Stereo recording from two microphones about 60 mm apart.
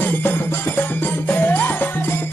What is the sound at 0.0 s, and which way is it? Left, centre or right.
Music, left.